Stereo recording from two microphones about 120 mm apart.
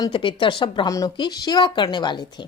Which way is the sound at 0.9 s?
30° left (ahead or behind).